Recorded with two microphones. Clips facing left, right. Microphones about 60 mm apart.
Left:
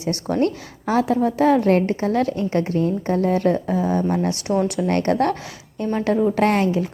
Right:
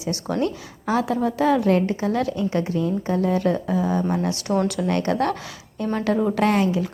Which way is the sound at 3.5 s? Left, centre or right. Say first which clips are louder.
Left 2 dB; left.